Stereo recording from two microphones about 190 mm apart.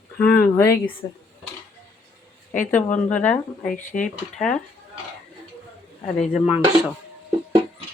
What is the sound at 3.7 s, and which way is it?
Speech, 45° left (ahead or behind).